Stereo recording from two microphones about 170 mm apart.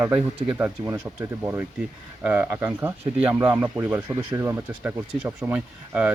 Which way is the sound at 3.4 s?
25° right (ahead or behind).